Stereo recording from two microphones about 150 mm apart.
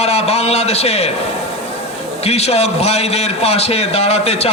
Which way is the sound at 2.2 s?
45° left (ahead or behind).